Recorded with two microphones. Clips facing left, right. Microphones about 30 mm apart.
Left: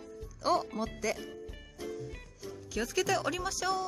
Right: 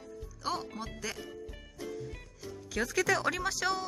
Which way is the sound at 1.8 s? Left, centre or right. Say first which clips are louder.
Even; centre.